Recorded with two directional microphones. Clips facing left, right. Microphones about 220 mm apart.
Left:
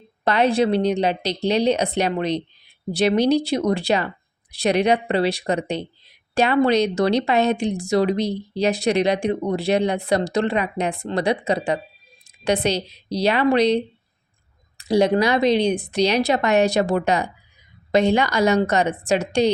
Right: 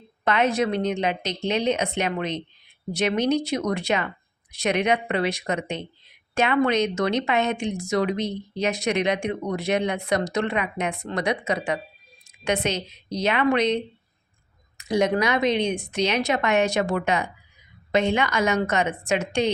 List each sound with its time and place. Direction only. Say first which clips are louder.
0.3 s speech: left 4 dB; 35° left (ahead or behind)
12.2 s a sound: left 4 dB; 35° left (ahead or behind)
12.6 s speech: left 4 dB; 35° left (ahead or behind)